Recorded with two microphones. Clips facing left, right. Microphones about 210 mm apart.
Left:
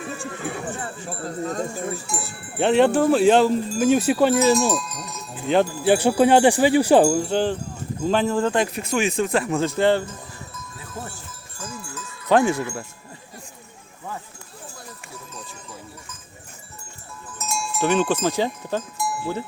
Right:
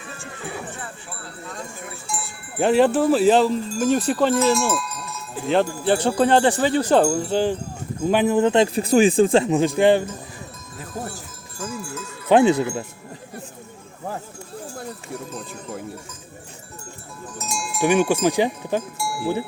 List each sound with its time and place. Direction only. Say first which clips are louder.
0.8 s speech: left 6 dB; 40° left (ahead or behind)
2.6 s wind chime: even; 5° right (ahead or behind)
4.5 s wind chime: left 2 dB; 20° left (ahead or behind)
5.5 s wind chime: left 1 dB; 5° left (ahead or behind)
8.1 s speech: right 4 dB; 15° right (ahead or behind)
11.9 s speech: right 3 dB; 20° right (ahead or behind)
17.3 s cowbell: left 1 dB; 15° right (ahead or behind)